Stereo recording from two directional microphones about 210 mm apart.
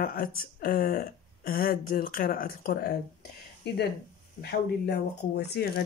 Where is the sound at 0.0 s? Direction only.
45° left (ahead or behind).